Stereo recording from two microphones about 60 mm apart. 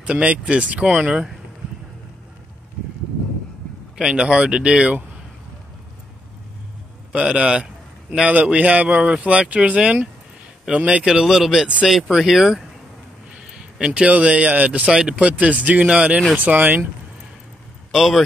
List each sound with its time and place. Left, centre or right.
0.0 s speech: centre
4.0 s speech: centre
7.1 s a man's voice: centre
11.1 s speech: centre
13.7 s speech: centre
16.3 s speech: right
17.9 s speech: centre